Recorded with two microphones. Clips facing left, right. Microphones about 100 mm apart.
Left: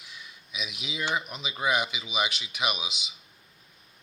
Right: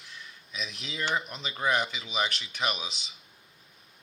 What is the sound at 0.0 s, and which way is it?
Speech, 10° left (ahead or behind).